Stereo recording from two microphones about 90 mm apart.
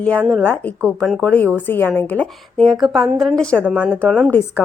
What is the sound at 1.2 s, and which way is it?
A woman's voice, 20° left (ahead or behind).